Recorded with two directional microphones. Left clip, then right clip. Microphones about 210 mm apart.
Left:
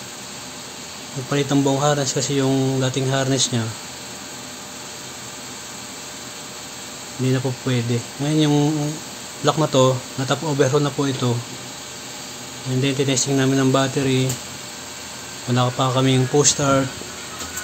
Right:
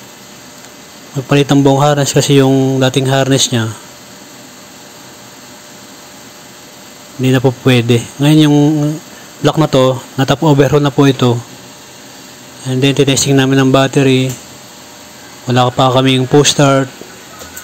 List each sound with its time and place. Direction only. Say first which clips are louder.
1.3 s speech: right 10 dB; 35° right (ahead or behind)
7.2 s speech: right 12 dB; 35° right (ahead or behind)
12.6 s speech: right 10 dB; 35° right (ahead or behind)
15.4 s speech: right 10 dB; 35° right (ahead or behind)